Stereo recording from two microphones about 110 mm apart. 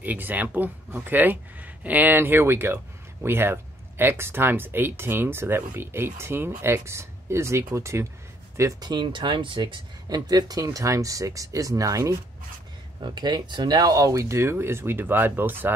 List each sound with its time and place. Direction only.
0.0 s speech: 15° right (ahead or behind)
8.8 s speech: 45° right (ahead or behind)
13.0 s speech: 40° right (ahead or behind); by 15.7 s 20° right (ahead or behind)